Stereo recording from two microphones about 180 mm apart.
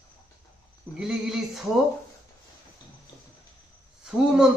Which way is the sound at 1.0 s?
5° right (ahead or behind).